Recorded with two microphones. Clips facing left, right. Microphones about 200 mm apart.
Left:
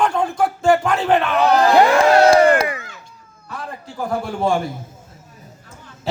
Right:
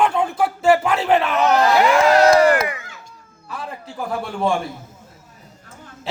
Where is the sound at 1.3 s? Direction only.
35° left (ahead or behind).